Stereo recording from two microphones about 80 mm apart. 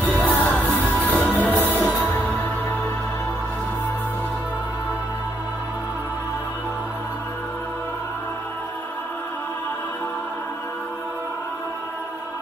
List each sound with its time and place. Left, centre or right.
0.0 s music: left
1.6 s music: left